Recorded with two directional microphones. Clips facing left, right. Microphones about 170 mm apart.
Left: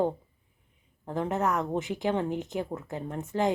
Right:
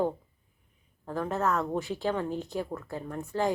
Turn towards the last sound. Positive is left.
turn(degrees=20)  # may be behind; listen again after turning